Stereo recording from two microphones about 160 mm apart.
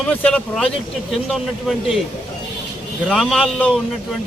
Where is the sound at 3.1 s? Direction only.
Centre (ahead or behind).